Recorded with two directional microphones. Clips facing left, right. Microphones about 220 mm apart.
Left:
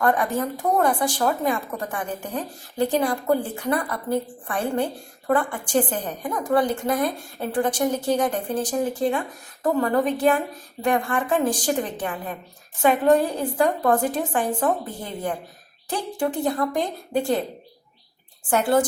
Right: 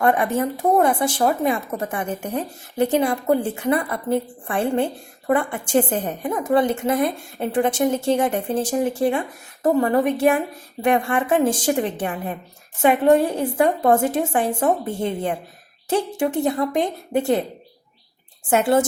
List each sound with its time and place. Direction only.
0.0 s a woman's voice: 25° right (ahead or behind)
18.5 s a woman's voice: 25° right (ahead or behind)